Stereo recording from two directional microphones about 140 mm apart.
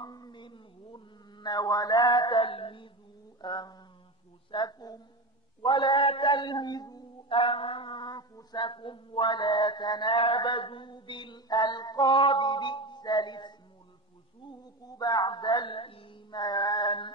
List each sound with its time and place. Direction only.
0.0 s a sound: 30° left (ahead or behind)
4.5 s a woman's voice: 30° left (ahead or behind)
14.9 s speech: 30° left (ahead or behind)